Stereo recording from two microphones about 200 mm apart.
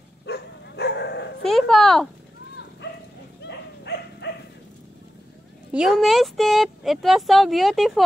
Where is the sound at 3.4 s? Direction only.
60° left (ahead or behind).